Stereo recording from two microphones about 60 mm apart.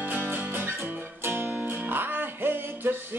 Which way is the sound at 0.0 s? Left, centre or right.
Right.